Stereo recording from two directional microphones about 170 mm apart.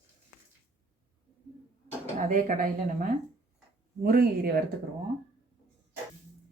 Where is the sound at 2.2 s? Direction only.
50° right (ahead or behind).